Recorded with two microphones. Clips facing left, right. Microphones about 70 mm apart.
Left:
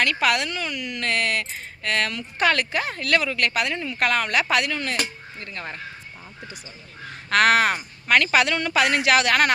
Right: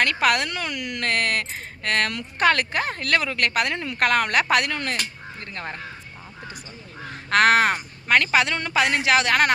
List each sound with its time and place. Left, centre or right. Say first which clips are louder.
0.0 s speech: right 1 dB; right
4.0 s speech: right 2 dB; right
5.4 s speech: right 1 dB; right
7.3 s a woman's voice: right 1 dB; right